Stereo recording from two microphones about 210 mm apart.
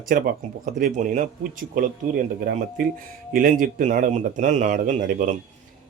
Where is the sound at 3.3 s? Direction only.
40° right (ahead or behind).